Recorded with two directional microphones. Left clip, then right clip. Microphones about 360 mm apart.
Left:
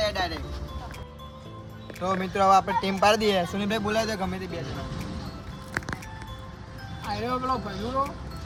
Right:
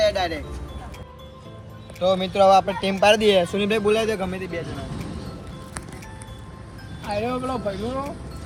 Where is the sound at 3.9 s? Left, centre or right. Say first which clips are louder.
Right 4 dB; left.